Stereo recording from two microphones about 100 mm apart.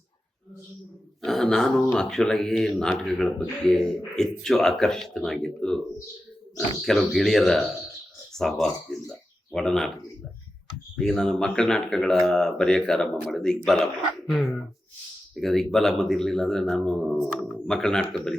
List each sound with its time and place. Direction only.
1.2 s speech: 5° left (ahead or behind)
6.8 s speech: centre (ahead or behind)
10.9 s speech: 5° left (ahead or behind)